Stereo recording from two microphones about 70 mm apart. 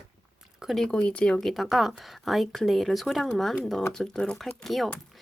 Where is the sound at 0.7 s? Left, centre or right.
Centre.